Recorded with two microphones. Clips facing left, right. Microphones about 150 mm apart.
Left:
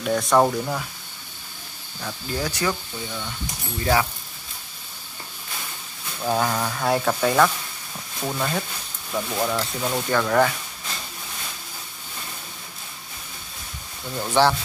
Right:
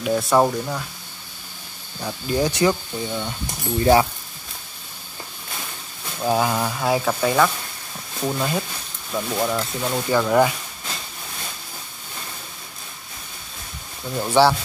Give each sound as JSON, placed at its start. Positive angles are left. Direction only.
{"t": 0.0, "sound": "speech", "side_deg": -5}
{"t": 2.0, "sound": "speech", "side_deg": -20}
{"t": 6.2, "sound": "speech", "side_deg": -10}
{"t": 14.1, "sound": "speech", "side_deg": -10}